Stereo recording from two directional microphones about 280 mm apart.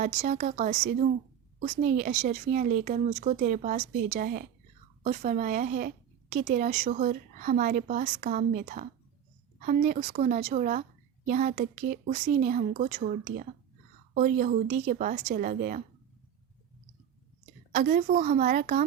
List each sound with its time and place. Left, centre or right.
0.0 s speech: right
17.7 s speech: right